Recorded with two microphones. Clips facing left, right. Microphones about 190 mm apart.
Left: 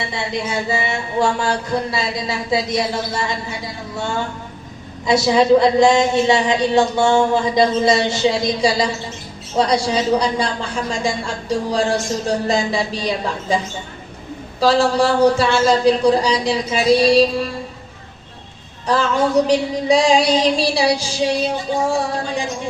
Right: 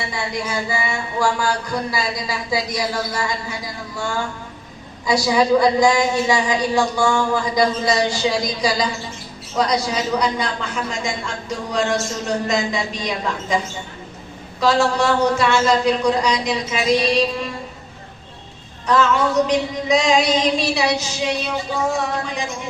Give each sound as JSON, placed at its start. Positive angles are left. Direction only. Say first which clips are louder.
{"t": 0.1, "sound": "speech", "louder": "left 2 dB", "side_deg": 25}
{"t": 9.6, "sound": "female singing", "louder": "left 3 dB", "side_deg": 30}
{"t": 14.6, "sound": "female singing", "louder": "left 2 dB", "side_deg": 30}
{"t": 19.5, "sound": "female singing", "louder": "left 3 dB", "side_deg": 30}